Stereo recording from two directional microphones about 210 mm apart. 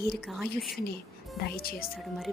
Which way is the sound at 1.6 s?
45° left (ahead or behind).